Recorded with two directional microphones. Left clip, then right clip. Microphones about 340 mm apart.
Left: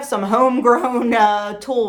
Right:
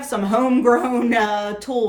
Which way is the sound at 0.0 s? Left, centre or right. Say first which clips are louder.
Left 4 dB; centre.